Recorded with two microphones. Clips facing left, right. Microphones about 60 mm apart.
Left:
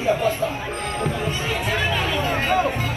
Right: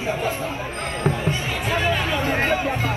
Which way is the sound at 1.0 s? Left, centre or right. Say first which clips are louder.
Right 3 dB; right.